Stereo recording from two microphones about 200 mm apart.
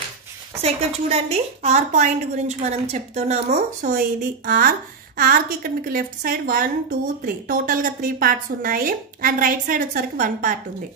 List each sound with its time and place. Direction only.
0.6 s a woman's voice: 30° right (ahead or behind)